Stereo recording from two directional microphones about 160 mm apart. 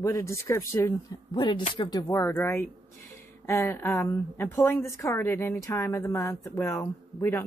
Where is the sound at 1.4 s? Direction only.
30° left (ahead or behind).